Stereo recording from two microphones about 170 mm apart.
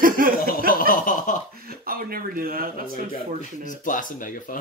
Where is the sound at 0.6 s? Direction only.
55° left (ahead or behind).